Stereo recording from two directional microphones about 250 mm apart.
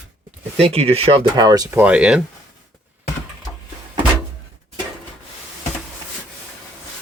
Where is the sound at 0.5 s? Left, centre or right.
Right; by 2.2 s centre.